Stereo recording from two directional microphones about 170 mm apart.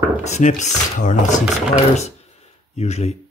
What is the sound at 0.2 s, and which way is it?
Speech, 45° left (ahead or behind).